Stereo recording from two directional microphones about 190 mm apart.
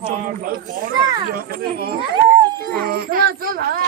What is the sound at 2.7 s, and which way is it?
Speech, 55° right (ahead or behind).